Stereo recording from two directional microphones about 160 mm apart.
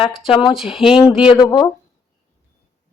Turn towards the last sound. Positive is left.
turn(degrees=20)  # may be behind; listen again after turning